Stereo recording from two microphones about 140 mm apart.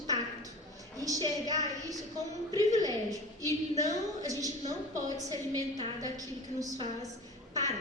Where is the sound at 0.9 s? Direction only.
25° right (ahead or behind).